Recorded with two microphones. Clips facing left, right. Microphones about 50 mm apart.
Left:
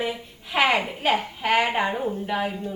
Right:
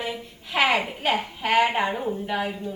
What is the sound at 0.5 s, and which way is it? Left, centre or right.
Speech, centre.